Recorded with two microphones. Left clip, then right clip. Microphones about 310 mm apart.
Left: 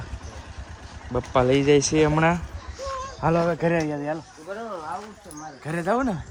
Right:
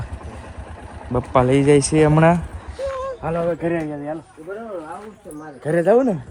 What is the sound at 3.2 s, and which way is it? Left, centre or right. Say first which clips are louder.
Speech: left 2 dB; left.